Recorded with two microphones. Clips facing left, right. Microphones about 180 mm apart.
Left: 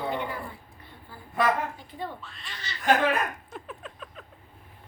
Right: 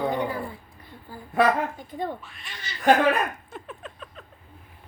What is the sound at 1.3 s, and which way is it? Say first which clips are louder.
Speech: right 4 dB; 50° right (ahead or behind).